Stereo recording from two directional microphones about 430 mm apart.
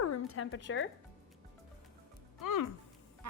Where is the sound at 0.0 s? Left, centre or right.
Left.